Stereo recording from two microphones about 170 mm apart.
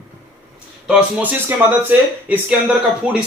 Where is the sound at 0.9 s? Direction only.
10° right (ahead or behind).